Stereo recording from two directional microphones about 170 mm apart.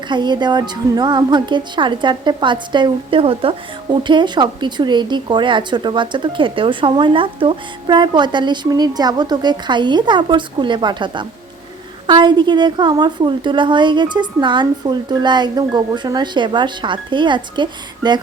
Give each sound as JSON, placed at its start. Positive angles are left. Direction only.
{"t": 0.1, "sound": "speech", "side_deg": -25}